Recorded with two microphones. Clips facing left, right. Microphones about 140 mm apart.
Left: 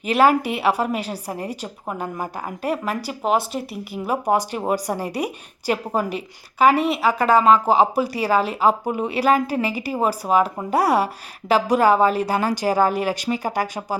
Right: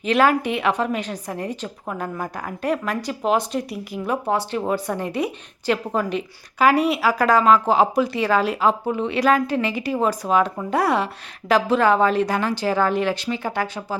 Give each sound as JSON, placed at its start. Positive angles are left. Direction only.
{"t": 0.0, "sound": "a woman's voice", "side_deg": 5}
{"t": 1.1, "sound": "a woman's voice", "side_deg": 30}
{"t": 1.5, "sound": "speech", "side_deg": 10}
{"t": 2.0, "sound": "speech", "side_deg": 25}
{"t": 2.6, "sound": "a woman's voice", "side_deg": 5}
{"t": 4.9, "sound": "a woman's voice", "side_deg": 35}
{"t": 5.2, "sound": "a woman's voice", "side_deg": 10}
{"t": 13.3, "sound": "a woman's voice", "side_deg": 40}